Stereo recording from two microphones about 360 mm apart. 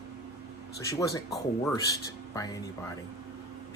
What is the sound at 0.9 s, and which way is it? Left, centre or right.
Speech, centre.